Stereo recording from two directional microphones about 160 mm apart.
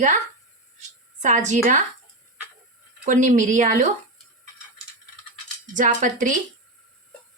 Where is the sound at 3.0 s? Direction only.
55° right (ahead or behind).